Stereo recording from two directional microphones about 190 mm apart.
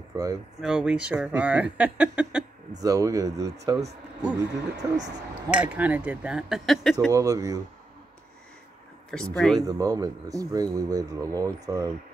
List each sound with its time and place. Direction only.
0.1 s speech: 20° right (ahead or behind)
0.6 s speech: 5° right (ahead or behind)
2.8 s speech: 20° right (ahead or behind)
4.8 s speech: 20° right (ahead or behind)
5.5 s speech: 5° right (ahead or behind)
7.1 s speech: 15° right (ahead or behind)
9.1 s speech: centre (ahead or behind)
9.6 s speech: 20° right (ahead or behind)